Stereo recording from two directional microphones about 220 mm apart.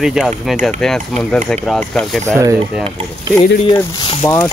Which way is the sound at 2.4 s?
15° right (ahead or behind).